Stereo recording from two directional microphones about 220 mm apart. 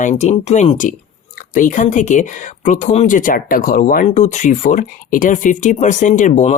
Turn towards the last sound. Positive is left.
turn(degrees=35)  # may be behind; listen again after turning